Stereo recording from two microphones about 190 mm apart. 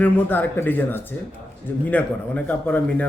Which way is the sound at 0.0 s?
10° left (ahead or behind).